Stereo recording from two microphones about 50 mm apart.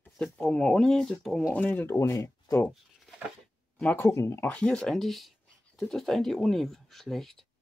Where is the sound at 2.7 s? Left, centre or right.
Centre.